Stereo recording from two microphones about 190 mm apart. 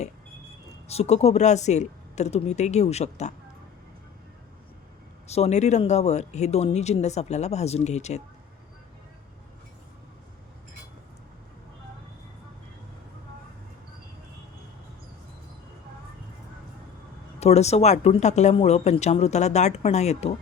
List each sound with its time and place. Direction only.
0.9 s speech: 35° left (ahead or behind)
5.3 s speech: 35° left (ahead or behind)
17.4 s speech: 35° left (ahead or behind)